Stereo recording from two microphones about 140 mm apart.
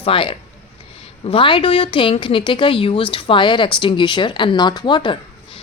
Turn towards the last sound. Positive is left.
turn(degrees=35)  # may be behind; listen again after turning